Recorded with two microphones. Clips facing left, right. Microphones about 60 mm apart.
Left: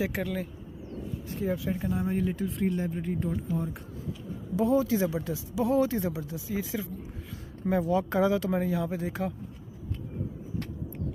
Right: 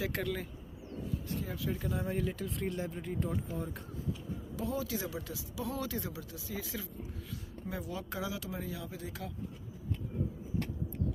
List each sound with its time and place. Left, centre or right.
0.1 s speech: centre
1.4 s speech: left
2.0 s speech: centre
4.6 s speech: left
7.7 s speech: left
8.6 s speech: left